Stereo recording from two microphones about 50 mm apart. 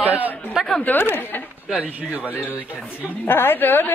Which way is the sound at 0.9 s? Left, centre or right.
Left.